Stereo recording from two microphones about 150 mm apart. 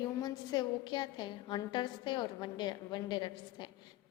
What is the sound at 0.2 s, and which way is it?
A woman's voice, 25° left (ahead or behind).